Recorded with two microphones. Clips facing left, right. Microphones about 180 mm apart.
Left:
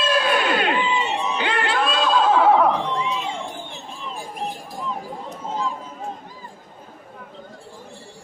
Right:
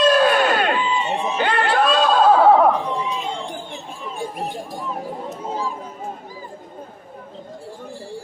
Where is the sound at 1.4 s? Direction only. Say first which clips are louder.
Right 6 dB; 45° right (ahead or behind).